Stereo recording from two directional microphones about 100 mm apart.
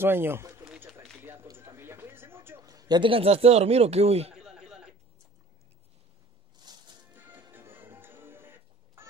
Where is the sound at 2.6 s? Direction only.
35° right (ahead or behind).